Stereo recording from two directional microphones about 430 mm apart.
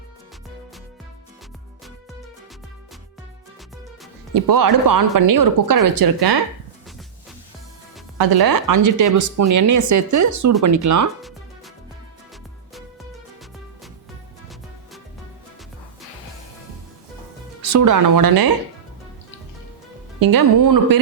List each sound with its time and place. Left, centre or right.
4.4 s speech: right
8.2 s speech: right
11.2 s music: centre
17.6 s speech: right
20.1 s speech: right